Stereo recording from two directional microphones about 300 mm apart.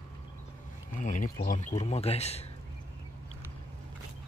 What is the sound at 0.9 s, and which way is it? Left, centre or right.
A man's voice, left.